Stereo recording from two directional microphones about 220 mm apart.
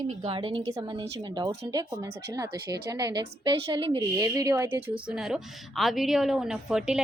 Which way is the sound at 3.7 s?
25° right (ahead or behind).